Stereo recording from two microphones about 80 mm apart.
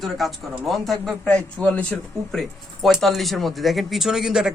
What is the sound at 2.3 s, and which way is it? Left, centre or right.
Speech, centre.